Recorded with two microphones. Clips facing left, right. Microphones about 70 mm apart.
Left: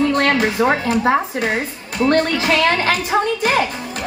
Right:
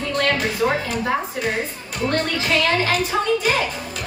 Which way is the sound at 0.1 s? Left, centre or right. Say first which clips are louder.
Left 5 dB; left.